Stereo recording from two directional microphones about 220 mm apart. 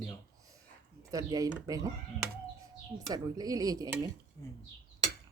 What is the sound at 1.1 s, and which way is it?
Speech, 15° right (ahead or behind).